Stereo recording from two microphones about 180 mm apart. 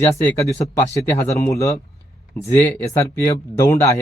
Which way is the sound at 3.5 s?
15° left (ahead or behind).